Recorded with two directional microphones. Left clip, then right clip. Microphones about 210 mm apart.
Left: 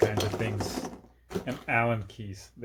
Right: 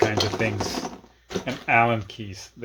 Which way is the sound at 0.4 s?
35° right (ahead or behind).